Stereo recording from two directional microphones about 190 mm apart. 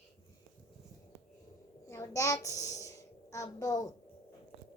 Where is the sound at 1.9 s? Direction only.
15° left (ahead or behind).